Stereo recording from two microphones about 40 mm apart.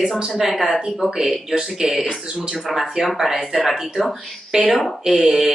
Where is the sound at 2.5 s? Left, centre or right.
Centre.